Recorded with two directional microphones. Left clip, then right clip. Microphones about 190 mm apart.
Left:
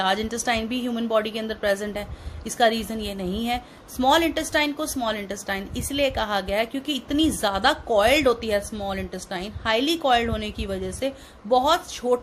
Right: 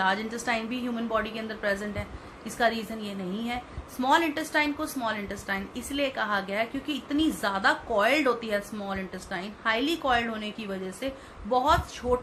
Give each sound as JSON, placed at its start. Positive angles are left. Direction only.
{"t": 0.0, "sound": "a woman's voice", "side_deg": 50}